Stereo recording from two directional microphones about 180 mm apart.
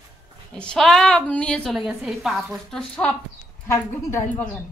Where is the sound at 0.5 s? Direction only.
5° left (ahead or behind).